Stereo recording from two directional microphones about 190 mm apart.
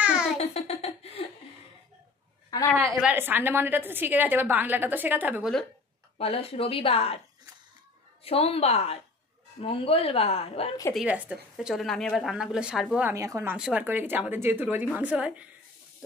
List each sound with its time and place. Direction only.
0.0 s music: 5° right (ahead or behind)
0.4 s a sound: 35° left (ahead or behind)
2.5 s a sound: 20° left (ahead or behind)
3.0 s a woman's voice: 10° right (ahead or behind)
6.1 s a woman's voice: 30° left (ahead or behind)
8.2 s a woman's voice: 30° left (ahead or behind)
11.0 s a woman's voice: 5° right (ahead or behind)
13.1 s a woman's voice: 15° right (ahead or behind)